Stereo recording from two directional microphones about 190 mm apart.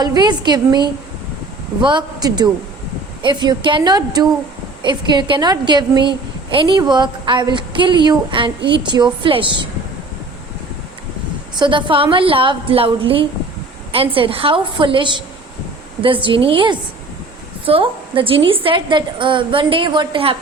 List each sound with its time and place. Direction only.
0.0 s a woman's voice: 20° right (ahead or behind)
11.6 s a woman's voice: 25° right (ahead or behind)